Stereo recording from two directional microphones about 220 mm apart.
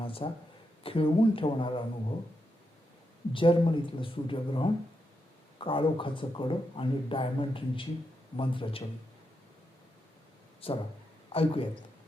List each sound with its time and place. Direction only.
0.0 s a sound: 25° left (ahead or behind)
0.9 s speech: 25° left (ahead or behind)
3.3 s speech: 25° left (ahead or behind)
10.6 s a man's voice: 25° left (ahead or behind)